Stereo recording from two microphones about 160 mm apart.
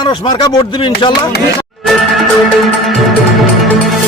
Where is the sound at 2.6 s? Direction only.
Centre (ahead or behind).